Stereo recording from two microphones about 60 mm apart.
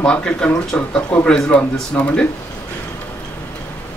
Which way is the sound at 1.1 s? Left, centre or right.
Centre.